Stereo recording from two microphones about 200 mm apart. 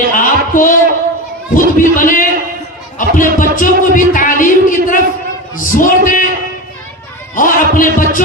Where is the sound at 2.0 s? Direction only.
40° left (ahead or behind).